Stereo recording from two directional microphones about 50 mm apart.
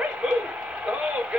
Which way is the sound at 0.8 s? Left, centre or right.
Right.